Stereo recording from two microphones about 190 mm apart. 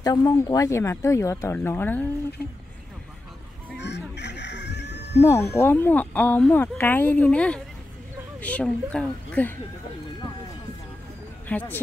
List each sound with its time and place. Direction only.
0.0 s speech: 20° left (ahead or behind)
3.7 s chicken: 65° left (ahead or behind)
5.2 s speech: 15° left (ahead or behind)
11.4 s speech: 10° left (ahead or behind)